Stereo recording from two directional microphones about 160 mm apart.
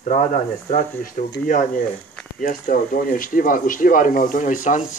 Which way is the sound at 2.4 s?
60° left (ahead or behind).